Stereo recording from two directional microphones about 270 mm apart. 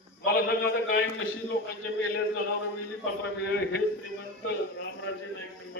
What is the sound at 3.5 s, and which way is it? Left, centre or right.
A man's voice, left.